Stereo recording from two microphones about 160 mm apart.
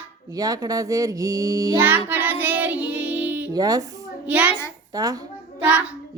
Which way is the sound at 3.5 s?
25° right (ahead or behind).